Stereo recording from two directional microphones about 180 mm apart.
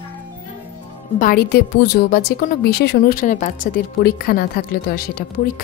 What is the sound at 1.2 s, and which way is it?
A woman's voice, 55° left (ahead or behind).